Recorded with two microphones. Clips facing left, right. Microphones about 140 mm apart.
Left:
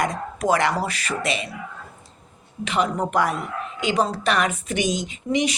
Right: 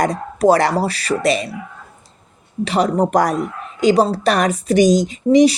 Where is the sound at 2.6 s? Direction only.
35° right (ahead or behind).